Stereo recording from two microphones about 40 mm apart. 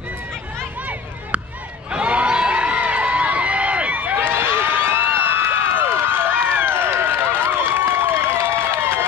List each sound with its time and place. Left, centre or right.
1.9 s crowd: right
4.3 s crowd: right
7.5 s run: right